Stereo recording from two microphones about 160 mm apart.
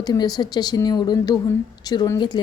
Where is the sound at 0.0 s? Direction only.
25° left (ahead or behind).